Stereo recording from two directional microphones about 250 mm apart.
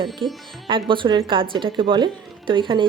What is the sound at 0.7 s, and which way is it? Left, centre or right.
A woman's voice, centre.